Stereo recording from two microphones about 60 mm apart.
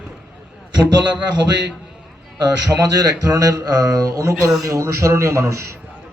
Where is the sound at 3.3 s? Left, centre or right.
Right.